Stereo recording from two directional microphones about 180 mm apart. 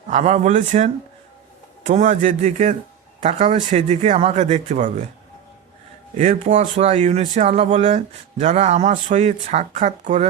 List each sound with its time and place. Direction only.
0.1 s speech: 40° right (ahead or behind)
1.9 s speech: 40° right (ahead or behind)
6.1 s speech: 45° right (ahead or behind)